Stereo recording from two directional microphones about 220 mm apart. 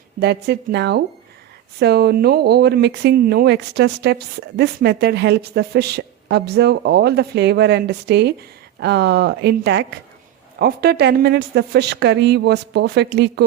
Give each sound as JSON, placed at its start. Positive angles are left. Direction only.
{"t": 0.2, "sound": "speech", "side_deg": -50}